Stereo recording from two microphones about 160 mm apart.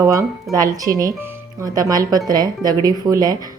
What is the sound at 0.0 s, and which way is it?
Speech, 20° right (ahead or behind).